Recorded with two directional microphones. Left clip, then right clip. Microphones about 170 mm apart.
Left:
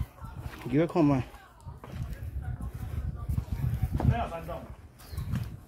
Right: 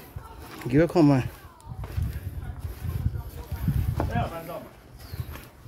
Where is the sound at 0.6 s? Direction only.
25° right (ahead or behind).